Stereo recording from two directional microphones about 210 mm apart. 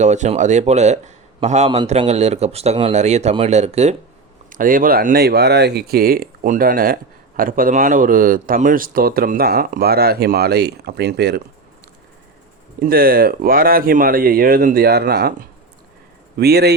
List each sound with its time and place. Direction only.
0.0 s a man's voice: 35° right (ahead or behind); by 11.4 s 50° right (ahead or behind)
12.8 s speech: 45° right (ahead or behind)